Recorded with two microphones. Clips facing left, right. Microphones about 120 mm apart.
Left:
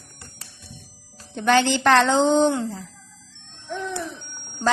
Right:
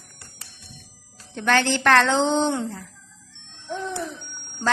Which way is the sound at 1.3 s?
15° left (ahead or behind).